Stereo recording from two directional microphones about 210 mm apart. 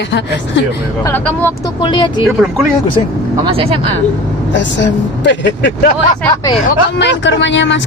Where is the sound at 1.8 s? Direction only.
20° left (ahead or behind).